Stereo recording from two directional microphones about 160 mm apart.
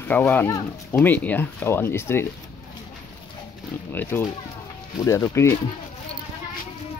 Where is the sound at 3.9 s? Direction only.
15° left (ahead or behind).